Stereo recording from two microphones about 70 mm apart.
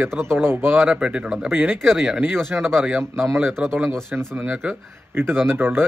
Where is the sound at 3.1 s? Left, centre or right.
Right.